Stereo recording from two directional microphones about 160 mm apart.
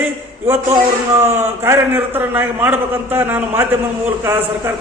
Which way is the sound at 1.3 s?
15° right (ahead or behind).